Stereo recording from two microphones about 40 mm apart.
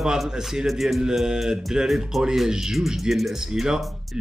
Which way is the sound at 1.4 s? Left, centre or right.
Centre.